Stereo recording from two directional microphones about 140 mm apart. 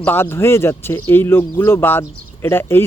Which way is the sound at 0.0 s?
15° left (ahead or behind).